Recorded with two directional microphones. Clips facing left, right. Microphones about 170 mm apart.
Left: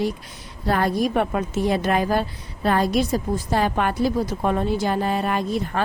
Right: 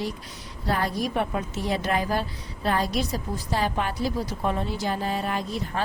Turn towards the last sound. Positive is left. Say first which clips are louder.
# left 5 dB
turn(degrees=60)  # may be behind; listen again after turning